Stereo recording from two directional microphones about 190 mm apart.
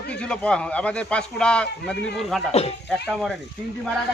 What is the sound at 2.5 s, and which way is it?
Speech, 35° left (ahead or behind).